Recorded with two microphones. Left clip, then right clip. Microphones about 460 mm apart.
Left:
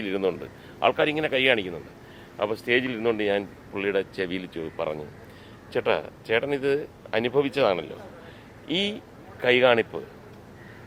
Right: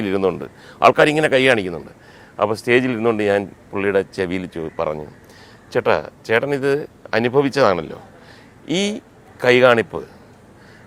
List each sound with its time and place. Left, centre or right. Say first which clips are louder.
0.0 s a man's voice: right 7 dB; right